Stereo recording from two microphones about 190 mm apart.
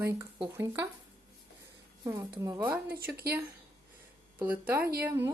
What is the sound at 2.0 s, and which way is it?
Speech, 15° right (ahead or behind).